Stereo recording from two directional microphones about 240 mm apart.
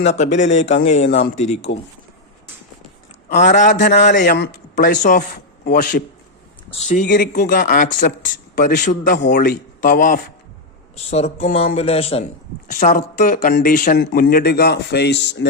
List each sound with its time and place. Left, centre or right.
0.1 s speech: left
3.4 s speech: left
9.1 s speech: left